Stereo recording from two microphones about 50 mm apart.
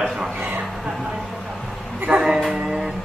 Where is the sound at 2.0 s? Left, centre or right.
Centre.